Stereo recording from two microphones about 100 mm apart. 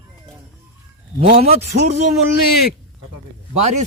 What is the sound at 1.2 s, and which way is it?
Speech, 80° right.